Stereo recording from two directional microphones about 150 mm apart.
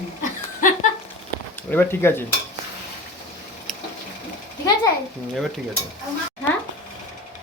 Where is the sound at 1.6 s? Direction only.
15° left (ahead or behind).